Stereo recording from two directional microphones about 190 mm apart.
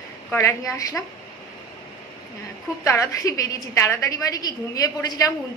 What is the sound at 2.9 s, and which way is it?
A woman's voice, 15° left (ahead or behind).